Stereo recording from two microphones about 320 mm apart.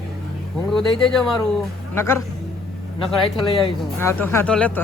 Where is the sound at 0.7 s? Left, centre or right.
Centre.